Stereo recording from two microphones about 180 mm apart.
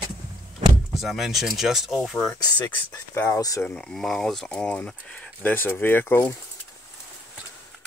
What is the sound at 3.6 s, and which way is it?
Speech, 5° left (ahead or behind).